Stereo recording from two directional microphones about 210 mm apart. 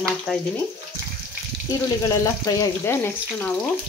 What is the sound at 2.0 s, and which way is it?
Speech, 15° left (ahead or behind).